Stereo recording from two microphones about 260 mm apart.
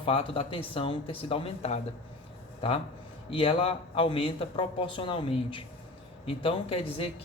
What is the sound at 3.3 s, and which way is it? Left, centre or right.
Speech, left.